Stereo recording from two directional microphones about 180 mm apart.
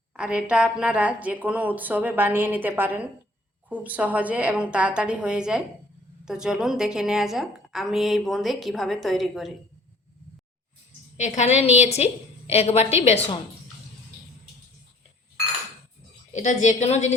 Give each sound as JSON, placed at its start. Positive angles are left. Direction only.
{"t": 0.1, "sound": "a woman's voice", "side_deg": -5}
{"t": 11.2, "sound": "a woman's voice", "side_deg": 40}
{"t": 16.3, "sound": "a woman's voice", "side_deg": 40}